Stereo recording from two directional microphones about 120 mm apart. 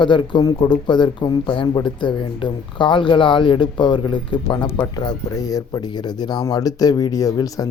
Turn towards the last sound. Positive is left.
turn(degrees=30)  # may be behind; listen again after turning